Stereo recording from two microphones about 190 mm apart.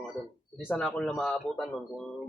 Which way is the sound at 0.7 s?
5° left (ahead or behind).